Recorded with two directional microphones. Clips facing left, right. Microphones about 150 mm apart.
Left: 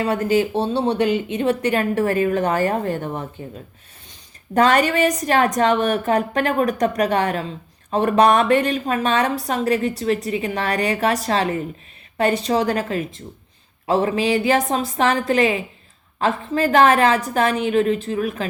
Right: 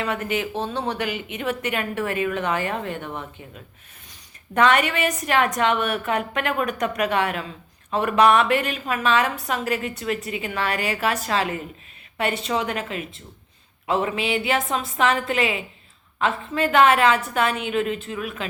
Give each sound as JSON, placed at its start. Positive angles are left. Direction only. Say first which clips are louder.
{"t": 0.0, "sound": "a woman's voice", "louder": "left 7 dB", "side_deg": 35}